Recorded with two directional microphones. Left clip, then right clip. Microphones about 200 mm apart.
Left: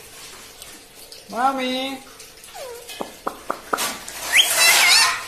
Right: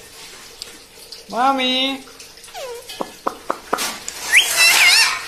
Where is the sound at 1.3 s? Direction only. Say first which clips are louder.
Right 4 dB; 25° right (ahead or behind).